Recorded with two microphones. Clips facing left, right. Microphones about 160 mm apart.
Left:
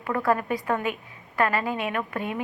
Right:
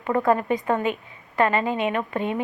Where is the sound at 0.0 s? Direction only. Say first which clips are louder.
Right 4 dB; 20° right (ahead or behind).